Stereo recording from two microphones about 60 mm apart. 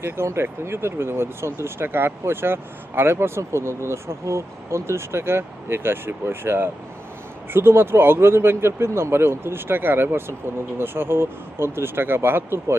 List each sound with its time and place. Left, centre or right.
0.0 s speech: right